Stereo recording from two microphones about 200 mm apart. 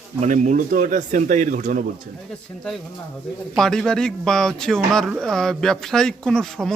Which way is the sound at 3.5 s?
Centre (ahead or behind).